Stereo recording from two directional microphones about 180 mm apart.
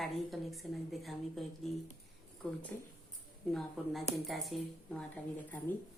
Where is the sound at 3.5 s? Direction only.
Centre (ahead or behind).